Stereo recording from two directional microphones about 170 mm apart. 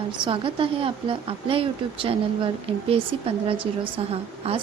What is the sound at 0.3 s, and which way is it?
A woman's voice, 30° right (ahead or behind).